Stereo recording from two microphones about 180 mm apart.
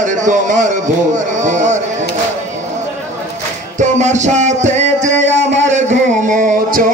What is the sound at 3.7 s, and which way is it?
Music, 40° right (ahead or behind).